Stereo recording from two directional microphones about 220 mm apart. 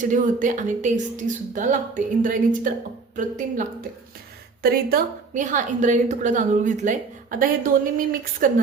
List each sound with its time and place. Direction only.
0.0 s a woman's voice: 35° right (ahead or behind)